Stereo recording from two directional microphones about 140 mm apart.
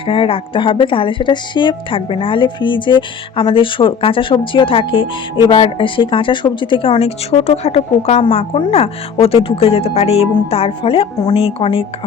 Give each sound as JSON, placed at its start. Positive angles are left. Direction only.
{"t": 0.0, "sound": "speech", "side_deg": 40}